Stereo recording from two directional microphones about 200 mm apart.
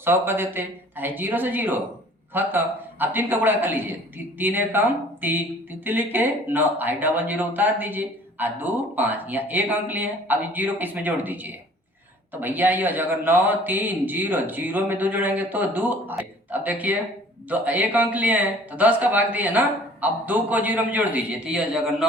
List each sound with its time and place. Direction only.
0.0 s speech: 10° right (ahead or behind)